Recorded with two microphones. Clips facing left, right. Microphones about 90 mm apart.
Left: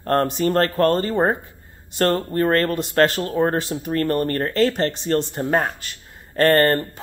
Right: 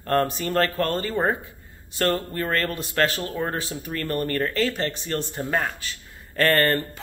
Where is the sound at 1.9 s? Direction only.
40° left (ahead or behind).